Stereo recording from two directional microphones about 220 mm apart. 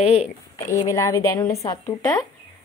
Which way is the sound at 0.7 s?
15° left (ahead or behind).